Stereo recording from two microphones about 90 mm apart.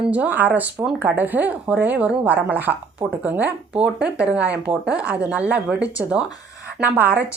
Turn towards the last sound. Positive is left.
turn(degrees=-15)  # may be behind; listen again after turning